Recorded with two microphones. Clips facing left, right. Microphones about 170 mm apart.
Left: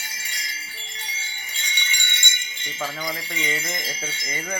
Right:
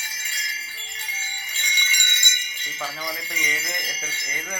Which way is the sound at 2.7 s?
20° left (ahead or behind).